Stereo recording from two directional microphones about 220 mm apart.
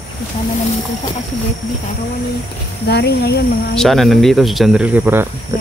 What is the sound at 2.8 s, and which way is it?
Speech, 50° left (ahead or behind).